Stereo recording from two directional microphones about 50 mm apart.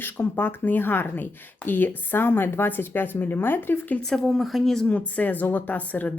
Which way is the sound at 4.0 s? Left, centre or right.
Centre.